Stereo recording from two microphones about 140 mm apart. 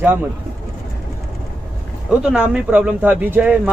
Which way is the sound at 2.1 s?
10° right (ahead or behind).